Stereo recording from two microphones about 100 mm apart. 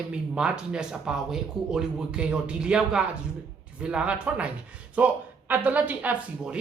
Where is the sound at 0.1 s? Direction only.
10° right (ahead or behind).